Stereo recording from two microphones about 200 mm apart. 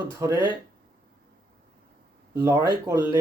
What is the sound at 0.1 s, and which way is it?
Speech, 15° right (ahead or behind).